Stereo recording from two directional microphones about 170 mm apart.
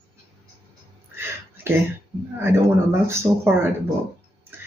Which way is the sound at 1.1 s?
15° right (ahead or behind).